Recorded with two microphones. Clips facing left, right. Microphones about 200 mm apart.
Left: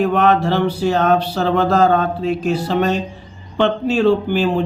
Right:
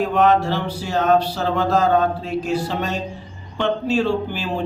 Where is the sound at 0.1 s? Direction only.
65° left (ahead or behind).